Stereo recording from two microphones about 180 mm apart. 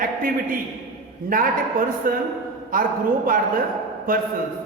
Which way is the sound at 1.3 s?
50° right (ahead or behind).